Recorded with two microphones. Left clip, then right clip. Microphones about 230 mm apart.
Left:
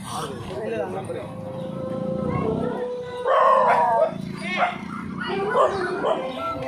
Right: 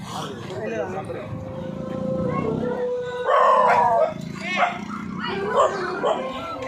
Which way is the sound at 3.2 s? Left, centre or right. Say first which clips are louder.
Even; right.